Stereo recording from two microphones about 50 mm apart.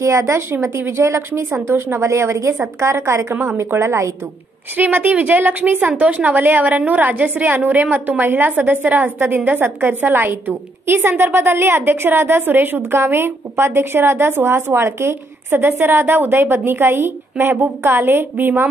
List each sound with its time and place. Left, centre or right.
0.0 s speech: right
0.5 s a woman's voice: right
4.7 s a woman's voice: right
12.9 s a woman's voice: right